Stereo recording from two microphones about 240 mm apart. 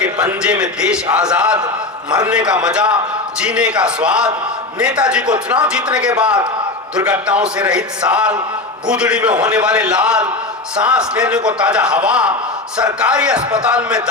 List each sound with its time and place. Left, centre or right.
0.0 s a sound: centre
0.6 s a man's voice: centre
1.5 s a man's voice: centre
2.3 s a man's voice: centre